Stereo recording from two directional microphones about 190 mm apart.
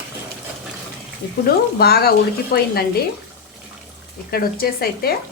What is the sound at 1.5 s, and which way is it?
Speech, 55° left (ahead or behind).